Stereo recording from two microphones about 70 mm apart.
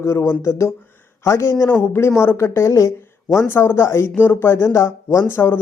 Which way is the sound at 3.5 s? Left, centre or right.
Left.